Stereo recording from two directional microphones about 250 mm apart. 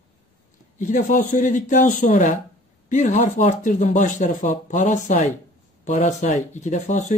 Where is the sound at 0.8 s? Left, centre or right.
Left.